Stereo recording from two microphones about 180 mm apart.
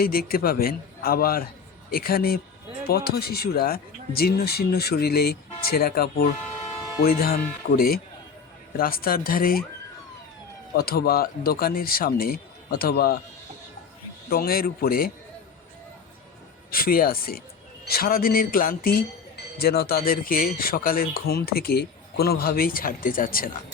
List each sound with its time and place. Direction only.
0.0 s speech: 55° left (ahead or behind)
10.8 s speech: 60° left (ahead or behind)
14.3 s speech: 55° left (ahead or behind)
16.7 s speech: 55° left (ahead or behind)